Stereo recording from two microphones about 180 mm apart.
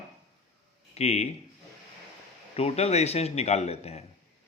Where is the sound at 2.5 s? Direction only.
35° left (ahead or behind).